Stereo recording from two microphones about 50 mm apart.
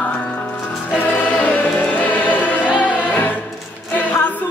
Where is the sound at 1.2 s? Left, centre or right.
Left.